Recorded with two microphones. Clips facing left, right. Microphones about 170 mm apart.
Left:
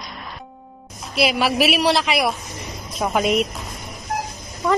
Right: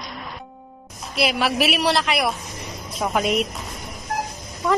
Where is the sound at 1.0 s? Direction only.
5° left (ahead or behind).